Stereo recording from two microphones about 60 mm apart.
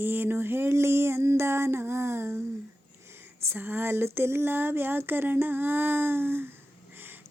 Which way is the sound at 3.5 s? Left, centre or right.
Right.